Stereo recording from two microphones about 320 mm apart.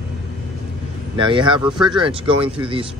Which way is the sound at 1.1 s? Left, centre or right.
Centre.